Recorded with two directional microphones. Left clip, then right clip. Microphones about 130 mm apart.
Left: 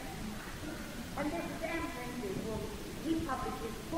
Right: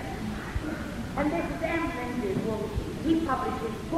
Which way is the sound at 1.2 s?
40° left (ahead or behind).